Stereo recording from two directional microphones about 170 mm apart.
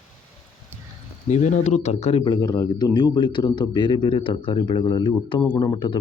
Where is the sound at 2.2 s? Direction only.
25° left (ahead or behind).